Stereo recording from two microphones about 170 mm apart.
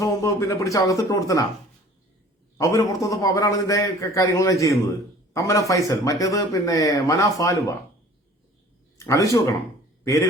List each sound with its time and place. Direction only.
0.0 s speech: 20° left (ahead or behind)
2.6 s speech: 20° left (ahead or behind)
9.0 s speech: 20° left (ahead or behind)